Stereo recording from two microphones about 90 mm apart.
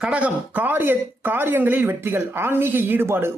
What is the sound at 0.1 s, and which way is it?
Speech, 20° right (ahead or behind).